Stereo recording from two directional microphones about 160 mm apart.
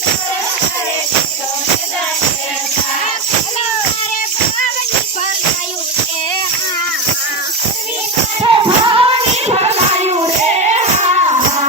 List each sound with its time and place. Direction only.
8.4 s music: 30° right (ahead or behind)